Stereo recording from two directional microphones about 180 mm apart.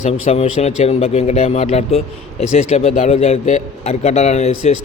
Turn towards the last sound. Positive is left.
turn(degrees=40)  # may be behind; listen again after turning